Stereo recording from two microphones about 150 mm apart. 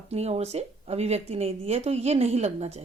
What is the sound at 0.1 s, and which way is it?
Speech, 45° right (ahead or behind).